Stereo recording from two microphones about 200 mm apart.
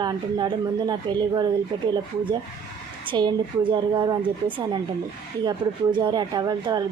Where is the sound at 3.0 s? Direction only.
25° right (ahead or behind).